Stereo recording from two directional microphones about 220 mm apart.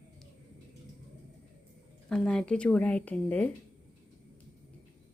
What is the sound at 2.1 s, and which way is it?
A woman's voice, 5° left (ahead or behind).